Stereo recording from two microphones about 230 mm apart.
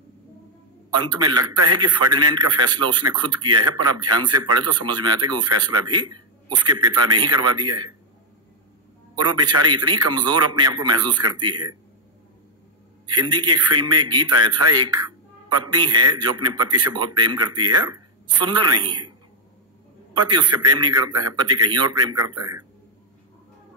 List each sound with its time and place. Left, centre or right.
0.9 s a man's voice: centre
9.2 s a man's voice: centre
13.3 s a man's voice: centre
20.2 s a man's voice: centre